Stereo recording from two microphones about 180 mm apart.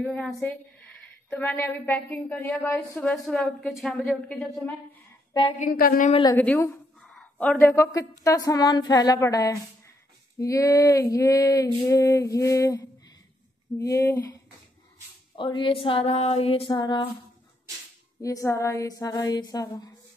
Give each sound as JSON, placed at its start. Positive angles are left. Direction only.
{"t": 0.0, "sound": "a woman's voice", "side_deg": 5}
{"t": 5.6, "sound": "a woman's voice", "side_deg": 55}
{"t": 6.3, "sound": "a woman's voice", "side_deg": 10}
{"t": 8.2, "sound": "female singing", "side_deg": 20}
{"t": 10.4, "sound": "a woman's voice", "side_deg": 15}
{"t": 15.3, "sound": "female singing", "side_deg": 25}
{"t": 18.2, "sound": "female singing", "side_deg": 15}